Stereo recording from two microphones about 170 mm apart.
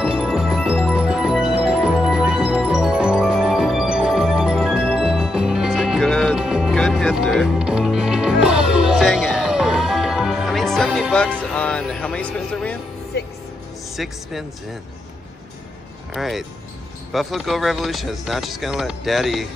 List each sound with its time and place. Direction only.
0.0 s music: 5° right (ahead or behind)
13.9 s speech: centre (ahead or behind)
16.1 s speech: centre (ahead or behind)